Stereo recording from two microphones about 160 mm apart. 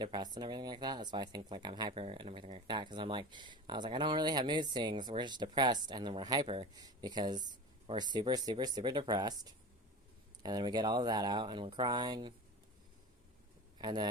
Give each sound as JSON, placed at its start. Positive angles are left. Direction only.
{"t": 0.0, "sound": "speech", "side_deg": -25}
{"t": 13.7, "sound": "speech", "side_deg": -30}